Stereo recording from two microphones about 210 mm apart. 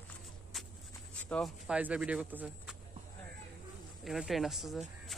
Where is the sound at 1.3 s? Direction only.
Centre (ahead or behind).